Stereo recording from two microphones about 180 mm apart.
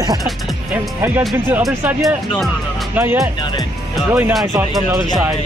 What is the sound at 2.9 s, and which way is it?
Speech, 15° right (ahead or behind).